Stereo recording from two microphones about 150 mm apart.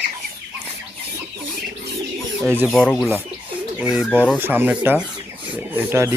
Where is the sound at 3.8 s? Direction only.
10° right (ahead or behind).